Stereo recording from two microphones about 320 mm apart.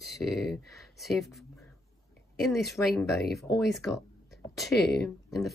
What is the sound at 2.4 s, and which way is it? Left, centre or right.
Speech, centre.